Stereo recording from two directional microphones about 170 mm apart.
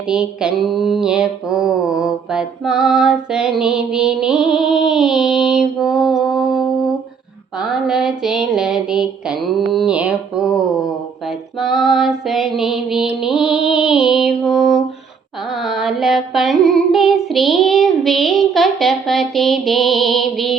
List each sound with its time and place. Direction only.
0.1 s mantra: 5° right (ahead or behind)
11.6 s mantra: centre (ahead or behind)
15.6 s female singing: centre (ahead or behind)